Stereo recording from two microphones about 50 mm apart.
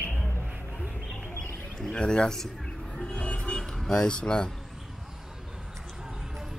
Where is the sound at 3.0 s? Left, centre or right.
Left.